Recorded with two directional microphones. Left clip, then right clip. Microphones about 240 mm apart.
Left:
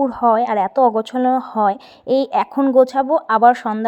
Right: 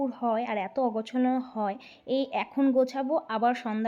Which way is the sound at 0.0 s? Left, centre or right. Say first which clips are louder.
Left 13 dB; centre.